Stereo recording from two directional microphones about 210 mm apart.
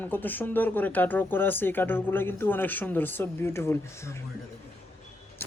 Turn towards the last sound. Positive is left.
turn(degrees=15)  # may be behind; listen again after turning